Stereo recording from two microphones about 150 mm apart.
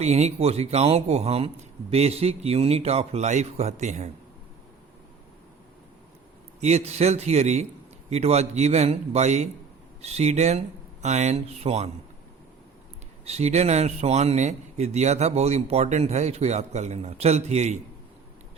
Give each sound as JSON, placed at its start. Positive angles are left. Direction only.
{"t": 0.0, "sound": "a man's voice", "side_deg": -45}
{"t": 6.6, "sound": "a man's voice", "side_deg": -45}
{"t": 13.2, "sound": "a man's voice", "side_deg": -45}